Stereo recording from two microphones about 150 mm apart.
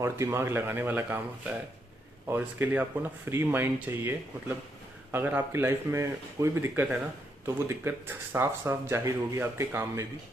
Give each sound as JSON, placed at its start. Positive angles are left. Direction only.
{"t": 0.0, "sound": "speech", "side_deg": -20}
{"t": 2.2, "sound": "speech", "side_deg": -10}